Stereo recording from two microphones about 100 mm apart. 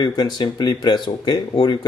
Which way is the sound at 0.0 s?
50° left (ahead or behind).